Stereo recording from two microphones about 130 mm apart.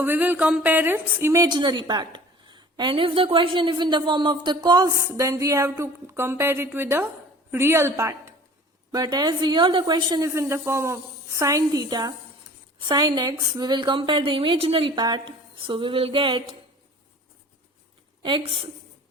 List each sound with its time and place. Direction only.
0.0 s speech: 15° right (ahead or behind)
1.5 s a woman's voice: 35° right (ahead or behind)
18.2 s a woman's voice: 40° right (ahead or behind)